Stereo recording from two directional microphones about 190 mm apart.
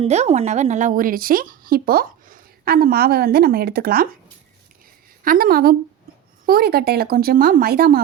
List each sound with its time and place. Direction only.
0.0 s a woman's voice: 35° right (ahead or behind); by 4.1 s 50° right (ahead or behind)
5.2 s a woman's voice: 50° right (ahead or behind)